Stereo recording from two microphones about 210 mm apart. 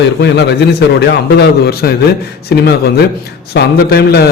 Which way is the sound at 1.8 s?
50° left (ahead or behind).